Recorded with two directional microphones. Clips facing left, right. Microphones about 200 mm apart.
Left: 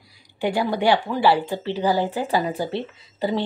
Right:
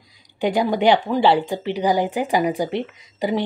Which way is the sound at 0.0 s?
20° right (ahead or behind).